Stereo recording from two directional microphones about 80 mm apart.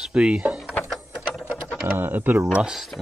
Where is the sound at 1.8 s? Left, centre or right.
Right.